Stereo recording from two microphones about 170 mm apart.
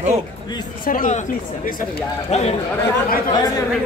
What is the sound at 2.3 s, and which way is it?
Speech, 40° left (ahead or behind).